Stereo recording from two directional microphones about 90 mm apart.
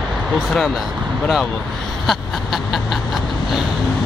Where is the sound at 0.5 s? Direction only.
5° left (ahead or behind).